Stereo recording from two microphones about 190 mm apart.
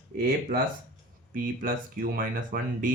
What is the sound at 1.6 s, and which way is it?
Speech, 45° right (ahead or behind).